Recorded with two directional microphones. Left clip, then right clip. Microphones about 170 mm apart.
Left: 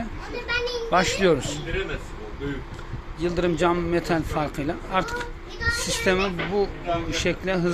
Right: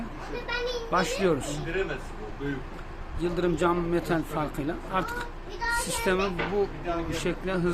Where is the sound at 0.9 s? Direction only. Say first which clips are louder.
Left 6 dB; 20° left (ahead or behind).